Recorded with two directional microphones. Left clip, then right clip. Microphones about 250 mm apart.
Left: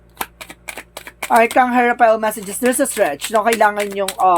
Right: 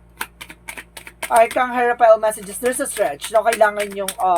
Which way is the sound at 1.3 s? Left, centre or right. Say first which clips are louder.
Left 3 dB; left.